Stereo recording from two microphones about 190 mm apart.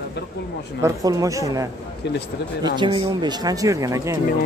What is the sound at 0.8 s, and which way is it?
Speech, 15° right (ahead or behind).